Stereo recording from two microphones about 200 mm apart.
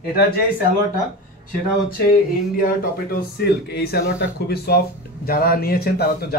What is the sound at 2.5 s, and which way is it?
A man's voice, 45° left (ahead or behind).